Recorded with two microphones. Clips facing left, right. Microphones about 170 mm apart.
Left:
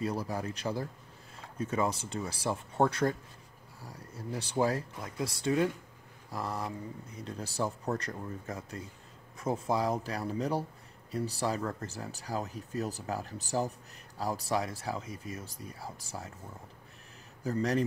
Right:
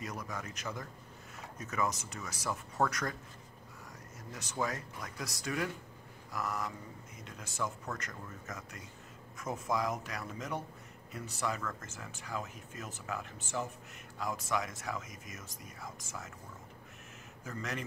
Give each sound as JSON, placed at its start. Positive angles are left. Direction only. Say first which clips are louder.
{"t": 0.0, "sound": "speech", "louder": "left 8 dB", "side_deg": 30}
{"t": 17.4, "sound": "speech", "louder": "left 11 dB", "side_deg": 35}